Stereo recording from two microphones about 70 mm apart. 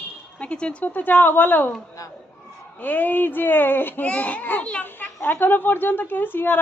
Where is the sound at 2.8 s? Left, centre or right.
Left.